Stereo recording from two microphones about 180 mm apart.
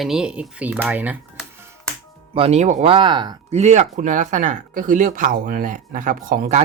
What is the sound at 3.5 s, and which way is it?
Speech, 40° right (ahead or behind).